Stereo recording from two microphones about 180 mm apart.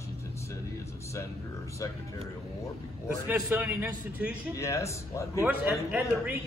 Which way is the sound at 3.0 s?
10° right (ahead or behind).